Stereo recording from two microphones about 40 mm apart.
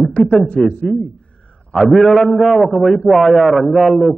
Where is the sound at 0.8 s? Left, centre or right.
Centre.